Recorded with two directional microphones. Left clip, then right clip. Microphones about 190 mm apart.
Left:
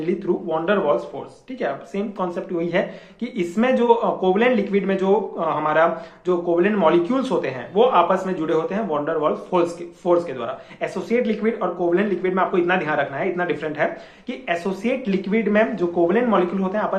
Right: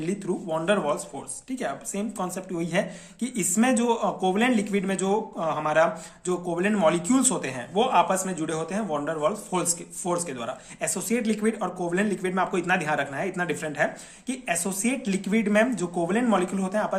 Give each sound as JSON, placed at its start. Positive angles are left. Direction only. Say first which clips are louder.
{"t": 0.5, "sound": "speech", "louder": "left 4 dB", "side_deg": -45}